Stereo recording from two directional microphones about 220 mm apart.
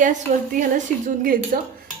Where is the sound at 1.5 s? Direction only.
40° right (ahead or behind).